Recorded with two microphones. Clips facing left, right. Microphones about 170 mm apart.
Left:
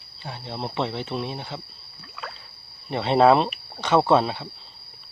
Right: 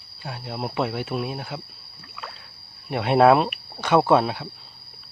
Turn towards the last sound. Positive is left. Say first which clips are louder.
# right 1 dB
turn(degrees=-10)  # may be behind; listen again after turning